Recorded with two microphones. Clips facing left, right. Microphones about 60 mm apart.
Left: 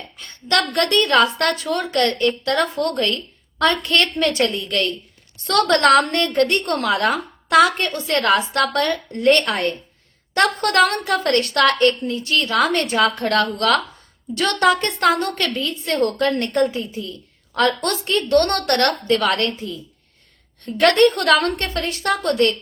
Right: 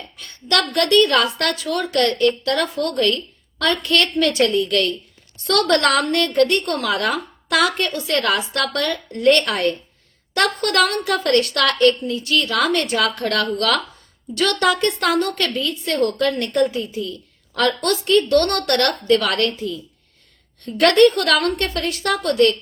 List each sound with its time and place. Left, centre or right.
0.2 s a woman's voice: left